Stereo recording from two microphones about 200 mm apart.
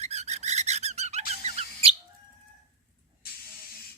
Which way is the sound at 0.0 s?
35° right (ahead or behind).